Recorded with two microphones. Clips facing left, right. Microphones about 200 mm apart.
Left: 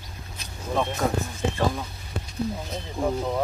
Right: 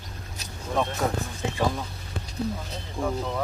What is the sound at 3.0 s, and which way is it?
Speech, 15° left (ahead or behind).